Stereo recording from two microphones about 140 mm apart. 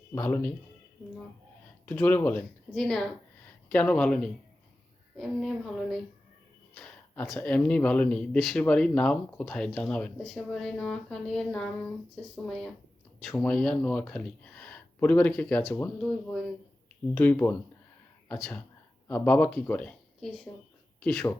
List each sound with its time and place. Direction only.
0.1 s speech: 15° left (ahead or behind)
1.9 s speech: 10° left (ahead or behind)